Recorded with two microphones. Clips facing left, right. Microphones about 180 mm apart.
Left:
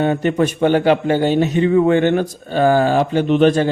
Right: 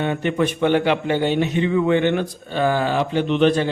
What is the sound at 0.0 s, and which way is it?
A man's voice, 40° left (ahead or behind).